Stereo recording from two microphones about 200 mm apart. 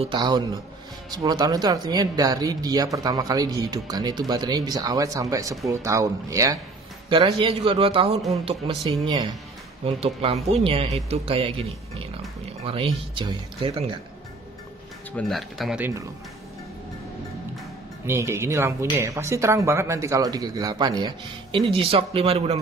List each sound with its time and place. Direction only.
0.0 s speech: 20° right (ahead or behind)
7.1 s speech: 25° right (ahead or behind)
15.1 s speech: centre (ahead or behind)
18.0 s speech: 15° right (ahead or behind); by 22.6 s 30° right (ahead or behind)